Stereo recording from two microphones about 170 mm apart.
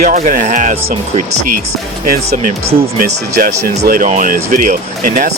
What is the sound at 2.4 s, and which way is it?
Speech, 60° right (ahead or behind).